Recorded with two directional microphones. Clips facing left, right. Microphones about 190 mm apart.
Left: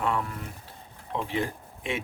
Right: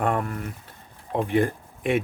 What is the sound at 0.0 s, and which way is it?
Speech, 55° right (ahead or behind).